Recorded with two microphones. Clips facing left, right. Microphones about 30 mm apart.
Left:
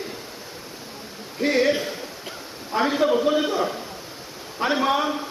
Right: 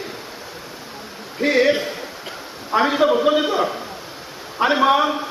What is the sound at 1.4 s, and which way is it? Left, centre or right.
A man's voice, right.